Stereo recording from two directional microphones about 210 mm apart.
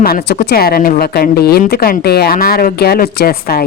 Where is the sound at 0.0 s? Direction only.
45° left (ahead or behind).